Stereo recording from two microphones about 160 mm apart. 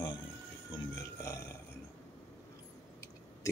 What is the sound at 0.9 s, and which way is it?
Burping, 20° left (ahead or behind).